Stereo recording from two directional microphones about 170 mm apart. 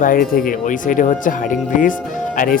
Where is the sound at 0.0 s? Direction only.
55° left (ahead or behind).